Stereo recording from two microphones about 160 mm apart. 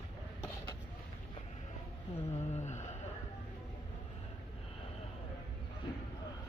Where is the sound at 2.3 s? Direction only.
45° left (ahead or behind).